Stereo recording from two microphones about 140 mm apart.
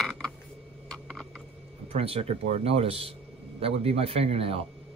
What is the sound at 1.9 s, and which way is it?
A man's voice, 45° right (ahead or behind).